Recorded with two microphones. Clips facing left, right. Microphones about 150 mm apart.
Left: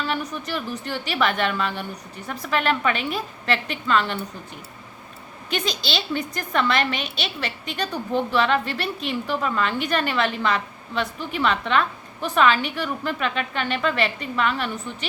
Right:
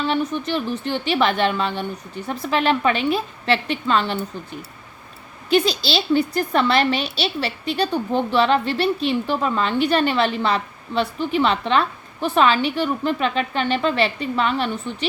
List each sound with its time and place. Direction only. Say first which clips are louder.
0.0 s a woman's voice: right 6 dB; 30° right (ahead or behind)
5.5 s a woman's voice: right 8 dB; 35° right (ahead or behind)